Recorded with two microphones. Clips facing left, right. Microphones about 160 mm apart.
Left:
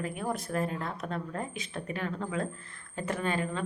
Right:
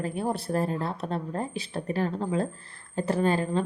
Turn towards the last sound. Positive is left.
turn(degrees=-35)  # may be behind; listen again after turning